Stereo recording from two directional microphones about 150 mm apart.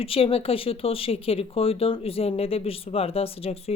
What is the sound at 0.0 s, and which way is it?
Speech, 40° left (ahead or behind).